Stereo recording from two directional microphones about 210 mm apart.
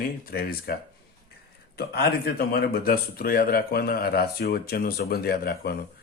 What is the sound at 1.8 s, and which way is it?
A man's voice, 50° left (ahead or behind).